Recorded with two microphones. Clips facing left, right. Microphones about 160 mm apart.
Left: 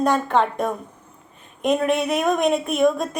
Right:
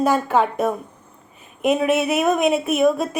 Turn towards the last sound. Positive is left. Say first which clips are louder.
# right 1 dB
turn(degrees=-5)  # may be behind; listen again after turning